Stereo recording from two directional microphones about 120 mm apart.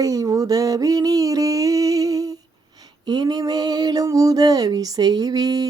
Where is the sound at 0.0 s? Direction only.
30° right (ahead or behind).